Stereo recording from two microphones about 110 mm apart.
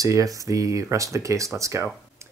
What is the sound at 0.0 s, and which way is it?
Speech, 30° right (ahead or behind).